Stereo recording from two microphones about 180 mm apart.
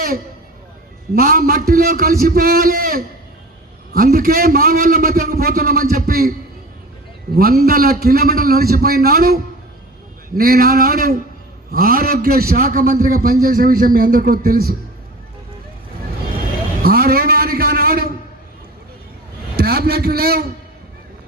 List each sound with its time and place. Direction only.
1.1 s a man's voice: 55° right (ahead or behind)
7.3 s a man's voice: 55° right (ahead or behind)
16.8 s a sound: 55° right (ahead or behind)
19.5 s a man's voice: 60° right (ahead or behind)